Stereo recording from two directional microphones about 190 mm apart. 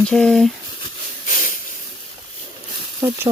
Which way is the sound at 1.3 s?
45° left (ahead or behind).